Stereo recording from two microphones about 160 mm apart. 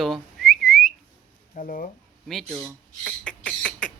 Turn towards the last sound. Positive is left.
turn(degrees=5)  # may be behind; listen again after turning